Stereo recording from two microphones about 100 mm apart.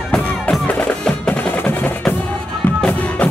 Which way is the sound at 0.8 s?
15° left (ahead or behind).